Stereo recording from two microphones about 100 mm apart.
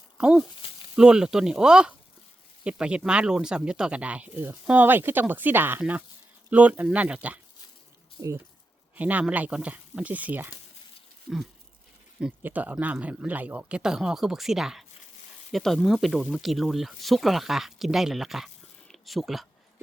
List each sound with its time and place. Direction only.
0.2 s speech: 10° right (ahead or behind)
8.2 s speech: 30° right (ahead or behind)
9.0 s speech: 15° right (ahead or behind)
12.4 s speech: 15° right (ahead or behind); by 19.5 s centre (ahead or behind)